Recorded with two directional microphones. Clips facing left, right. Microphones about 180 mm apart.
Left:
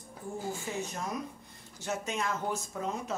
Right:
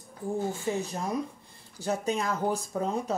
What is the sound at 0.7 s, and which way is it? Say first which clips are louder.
Speech: right 6 dB; 30° right (ahead or behind).